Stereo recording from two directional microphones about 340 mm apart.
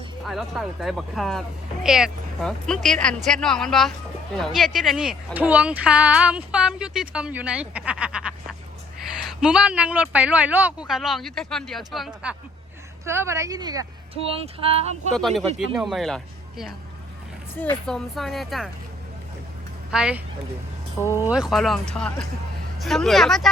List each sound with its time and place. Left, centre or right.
0.3 s a woman's voice: centre
15.1 s a woman's voice: centre
19.9 s a woman's voice: centre
21.2 s a woman's voice: centre